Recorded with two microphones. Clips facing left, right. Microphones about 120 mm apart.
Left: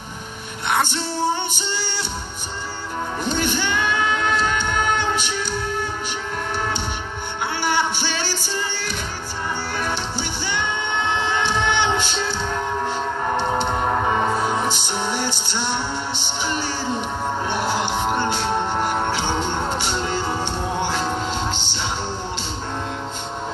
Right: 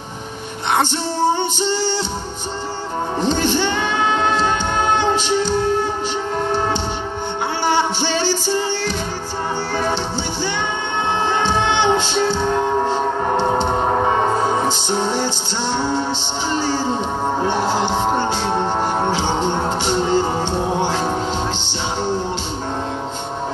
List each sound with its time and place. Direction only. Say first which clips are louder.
3.2 s music: right 6 dB; 30° right (ahead or behind)
6.5 s a sound: right 5 dB; 30° right (ahead or behind)
7.6 s music: right 4 dB; 30° right (ahead or behind)
11.1 s music: right 5 dB; 35° right (ahead or behind)